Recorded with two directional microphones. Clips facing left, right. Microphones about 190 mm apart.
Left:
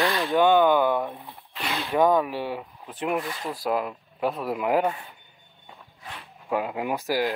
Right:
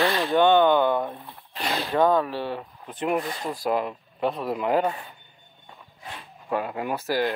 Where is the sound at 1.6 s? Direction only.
35° right (ahead or behind).